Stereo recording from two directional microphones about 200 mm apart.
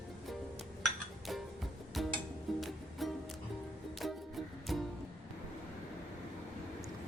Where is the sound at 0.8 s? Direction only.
Centre (ahead or behind).